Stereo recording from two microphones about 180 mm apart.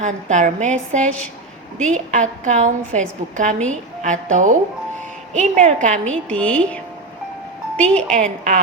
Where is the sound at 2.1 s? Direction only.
45° right (ahead or behind).